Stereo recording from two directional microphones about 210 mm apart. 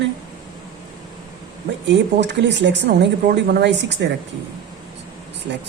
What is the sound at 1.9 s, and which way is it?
Speech, 55° right (ahead or behind).